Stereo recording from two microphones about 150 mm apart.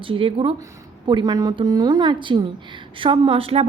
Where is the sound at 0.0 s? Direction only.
35° right (ahead or behind).